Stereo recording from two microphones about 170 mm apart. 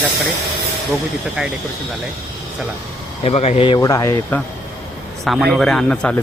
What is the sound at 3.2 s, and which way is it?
Speech, 40° left (ahead or behind).